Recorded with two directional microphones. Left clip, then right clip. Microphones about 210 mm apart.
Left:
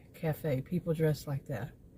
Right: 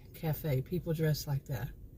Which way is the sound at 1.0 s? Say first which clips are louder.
Left 3 dB; 10° left (ahead or behind).